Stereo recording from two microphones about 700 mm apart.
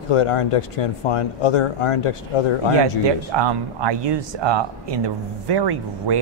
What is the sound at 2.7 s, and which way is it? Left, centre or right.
Speech, right.